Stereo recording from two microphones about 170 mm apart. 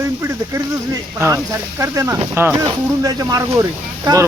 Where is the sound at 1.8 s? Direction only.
20° right (ahead or behind).